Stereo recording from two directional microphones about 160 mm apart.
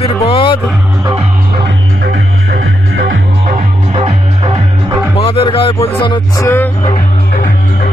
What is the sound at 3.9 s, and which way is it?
Music, 35° right (ahead or behind).